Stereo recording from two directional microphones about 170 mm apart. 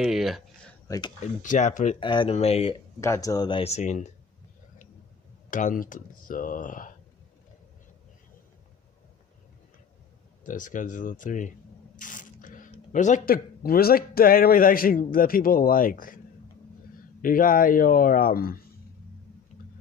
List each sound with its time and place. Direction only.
0.0 s a sound: centre (ahead or behind)
0.8 s speech: 20° left (ahead or behind)
1.2 s speech: 45° left (ahead or behind)
2.0 s speech: 30° left (ahead or behind)
3.0 s speech: 20° left (ahead or behind); by 4.1 s 45° left (ahead or behind)
5.5 s speech: 50° left (ahead or behind)
10.4 s speech: 50° left (ahead or behind)
12.0 s a sound: 50° left (ahead or behind)
12.7 s speech: 45° left (ahead or behind)
17.2 s speech: 55° left (ahead or behind)